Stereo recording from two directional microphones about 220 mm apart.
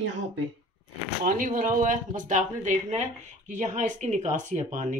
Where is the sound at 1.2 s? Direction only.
40° right (ahead or behind).